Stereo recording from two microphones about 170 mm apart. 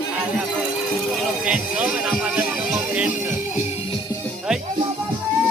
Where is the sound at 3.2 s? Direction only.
45° left (ahead or behind).